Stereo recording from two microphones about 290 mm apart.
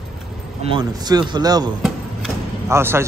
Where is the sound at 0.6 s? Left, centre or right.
Centre.